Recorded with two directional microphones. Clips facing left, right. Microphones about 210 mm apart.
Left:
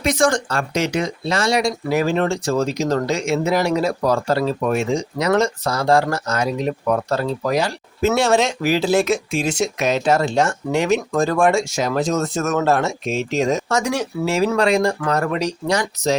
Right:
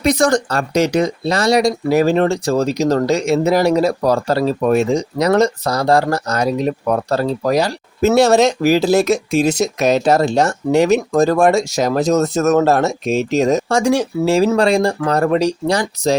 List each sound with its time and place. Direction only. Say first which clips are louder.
0.0 s speech: right 4 dB; 40° right (ahead or behind)